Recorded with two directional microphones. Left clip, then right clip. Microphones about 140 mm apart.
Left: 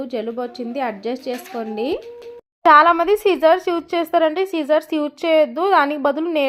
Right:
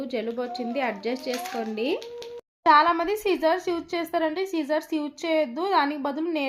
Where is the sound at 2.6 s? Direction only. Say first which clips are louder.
Left 7 dB; 35° left (ahead or behind).